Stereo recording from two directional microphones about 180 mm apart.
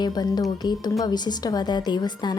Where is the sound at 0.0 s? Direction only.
20° left (ahead or behind).